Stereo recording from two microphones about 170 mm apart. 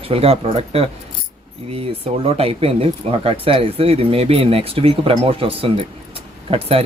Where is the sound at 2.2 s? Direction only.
35° right (ahead or behind).